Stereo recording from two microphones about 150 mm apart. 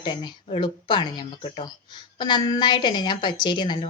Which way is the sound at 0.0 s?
30° left (ahead or behind).